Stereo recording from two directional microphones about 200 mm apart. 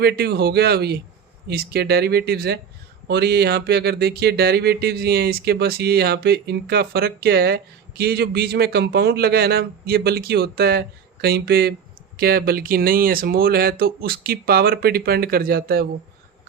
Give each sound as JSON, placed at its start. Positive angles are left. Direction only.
{"t": 0.0, "sound": "speech", "side_deg": -55}